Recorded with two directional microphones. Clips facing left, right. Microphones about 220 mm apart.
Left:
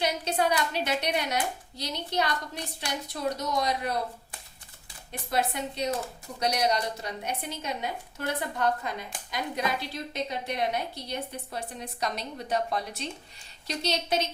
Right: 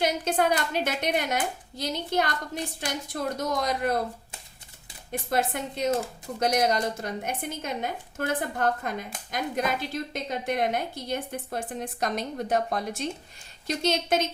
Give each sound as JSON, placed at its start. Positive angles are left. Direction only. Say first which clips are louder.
{"t": 0.0, "sound": "a woman's voice", "louder": "right 3 dB", "side_deg": -50}
{"t": 5.3, "sound": "a woman's voice", "louder": "right 1 dB", "side_deg": -50}